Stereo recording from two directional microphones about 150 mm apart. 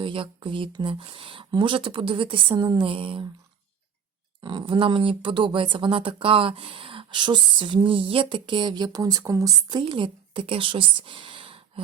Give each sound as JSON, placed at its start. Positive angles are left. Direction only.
{"t": 0.0, "sound": "speech", "side_deg": -35}
{"t": 4.4, "sound": "speech", "side_deg": -30}